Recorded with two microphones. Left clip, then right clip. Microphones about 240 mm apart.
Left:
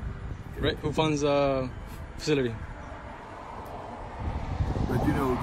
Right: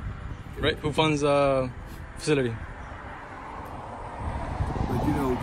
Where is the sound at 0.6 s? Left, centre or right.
Centre.